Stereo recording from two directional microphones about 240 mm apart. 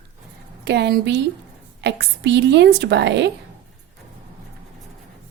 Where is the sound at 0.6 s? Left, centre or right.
Right.